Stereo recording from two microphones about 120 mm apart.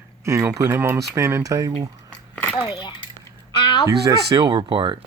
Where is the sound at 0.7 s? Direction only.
20° right (ahead or behind).